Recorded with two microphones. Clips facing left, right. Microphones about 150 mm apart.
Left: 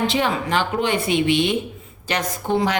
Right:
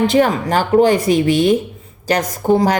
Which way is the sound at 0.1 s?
45° right (ahead or behind).